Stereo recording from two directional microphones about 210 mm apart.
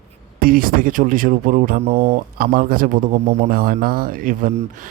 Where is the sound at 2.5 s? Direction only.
40° right (ahead or behind).